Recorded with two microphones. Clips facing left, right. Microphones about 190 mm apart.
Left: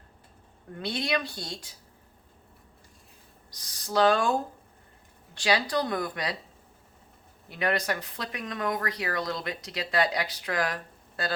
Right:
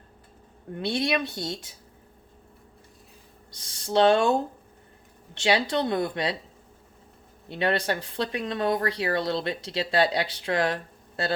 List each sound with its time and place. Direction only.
0.7 s speech: 25° right (ahead or behind)
3.6 s speech: 25° right (ahead or behind)
7.4 s speech: 30° right (ahead or behind)